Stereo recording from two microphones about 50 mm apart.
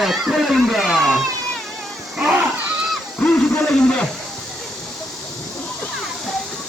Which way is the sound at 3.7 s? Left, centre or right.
Centre.